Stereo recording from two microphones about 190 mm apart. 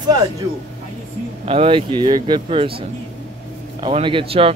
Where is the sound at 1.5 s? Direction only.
30° right (ahead or behind).